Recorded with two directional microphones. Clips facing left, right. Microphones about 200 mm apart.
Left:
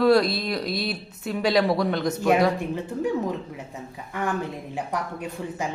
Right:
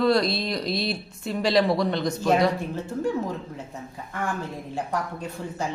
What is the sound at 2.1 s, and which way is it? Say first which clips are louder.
Speech: left 3 dB; 15° left (ahead or behind).